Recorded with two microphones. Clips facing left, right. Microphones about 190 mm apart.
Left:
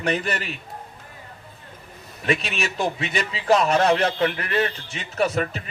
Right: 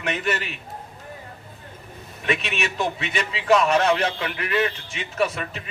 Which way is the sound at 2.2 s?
35° left (ahead or behind).